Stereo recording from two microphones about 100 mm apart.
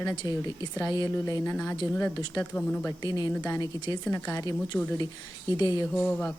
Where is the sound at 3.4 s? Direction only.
35° left (ahead or behind).